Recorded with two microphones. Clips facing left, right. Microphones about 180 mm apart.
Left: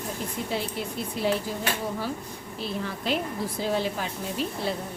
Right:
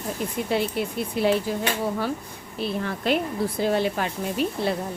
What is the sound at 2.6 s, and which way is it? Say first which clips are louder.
Speech: right 5 dB; 60° right (ahead or behind).